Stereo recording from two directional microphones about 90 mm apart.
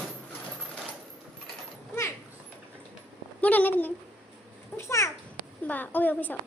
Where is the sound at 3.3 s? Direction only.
20° left (ahead or behind).